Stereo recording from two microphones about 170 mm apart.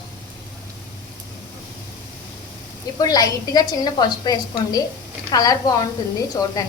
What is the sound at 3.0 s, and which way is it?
A woman's voice, 25° left (ahead or behind).